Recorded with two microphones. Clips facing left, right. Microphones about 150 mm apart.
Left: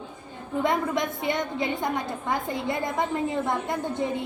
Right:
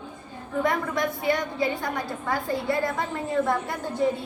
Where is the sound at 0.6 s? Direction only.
20° left (ahead or behind).